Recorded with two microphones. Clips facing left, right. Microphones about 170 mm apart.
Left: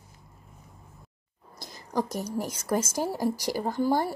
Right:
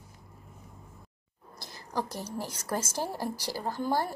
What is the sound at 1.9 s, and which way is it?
Speech, 15° left (ahead or behind).